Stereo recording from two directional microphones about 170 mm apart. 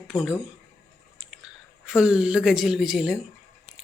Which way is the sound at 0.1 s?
5° right (ahead or behind).